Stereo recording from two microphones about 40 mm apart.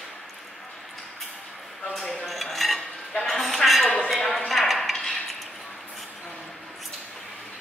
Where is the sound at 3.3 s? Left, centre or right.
Centre.